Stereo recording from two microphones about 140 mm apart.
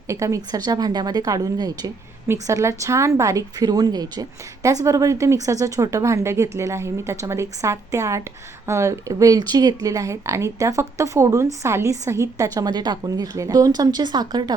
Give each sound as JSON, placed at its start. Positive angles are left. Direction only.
{"t": 0.1, "sound": "speech", "side_deg": -20}